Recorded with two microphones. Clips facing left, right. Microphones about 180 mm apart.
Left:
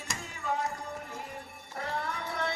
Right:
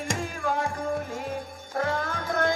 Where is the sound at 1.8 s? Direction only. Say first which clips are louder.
Right 7 dB; 70° right (ahead or behind).